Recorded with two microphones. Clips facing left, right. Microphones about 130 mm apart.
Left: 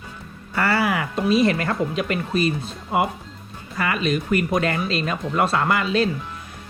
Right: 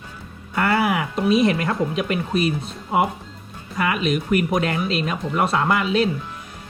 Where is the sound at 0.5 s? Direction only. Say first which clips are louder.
Right 1 dB; 20° right (ahead or behind).